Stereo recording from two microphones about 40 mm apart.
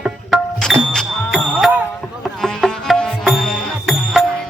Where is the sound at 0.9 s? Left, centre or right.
Centre.